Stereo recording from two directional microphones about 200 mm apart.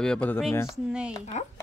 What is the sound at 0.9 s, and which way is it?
Speech, 5° right (ahead or behind).